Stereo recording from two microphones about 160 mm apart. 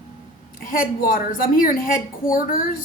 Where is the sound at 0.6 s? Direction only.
60° left (ahead or behind).